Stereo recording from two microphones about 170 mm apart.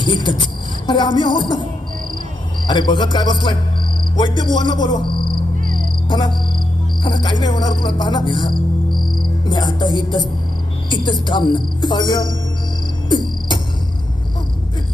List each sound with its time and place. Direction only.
0.0 s music: 25° left (ahead or behind)
2.6 s music: 25° left (ahead or behind)
5.6 s cricket: 55° right (ahead or behind)
6.1 s cricket: 25° left (ahead or behind)
7.0 s music: 25° left (ahead or behind)
13.1 s a sound: 25° left (ahead or behind)